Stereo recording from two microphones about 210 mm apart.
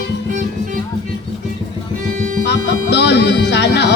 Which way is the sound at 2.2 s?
40° right (ahead or behind).